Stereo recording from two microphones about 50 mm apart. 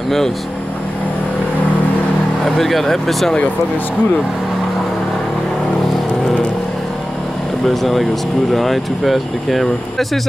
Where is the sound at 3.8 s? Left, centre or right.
Left.